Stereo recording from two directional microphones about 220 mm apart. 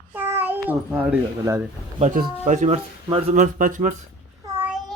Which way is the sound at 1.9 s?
35° right (ahead or behind).